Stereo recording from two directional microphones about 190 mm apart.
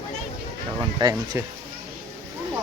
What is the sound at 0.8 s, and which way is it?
Speech, 20° right (ahead or behind).